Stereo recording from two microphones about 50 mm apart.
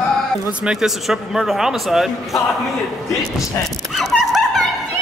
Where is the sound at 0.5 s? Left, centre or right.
Right.